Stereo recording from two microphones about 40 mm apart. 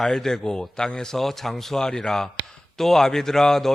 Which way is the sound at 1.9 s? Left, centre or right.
Left.